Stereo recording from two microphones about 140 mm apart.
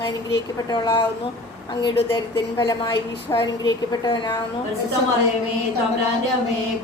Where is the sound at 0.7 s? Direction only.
35° left (ahead or behind).